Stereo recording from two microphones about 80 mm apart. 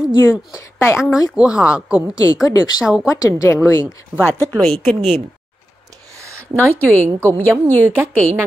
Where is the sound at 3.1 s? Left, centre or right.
Left.